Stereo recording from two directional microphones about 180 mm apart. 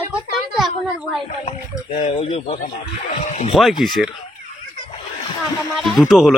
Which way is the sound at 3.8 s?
Centre (ahead or behind).